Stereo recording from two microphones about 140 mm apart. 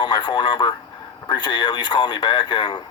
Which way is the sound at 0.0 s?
30° left (ahead or behind).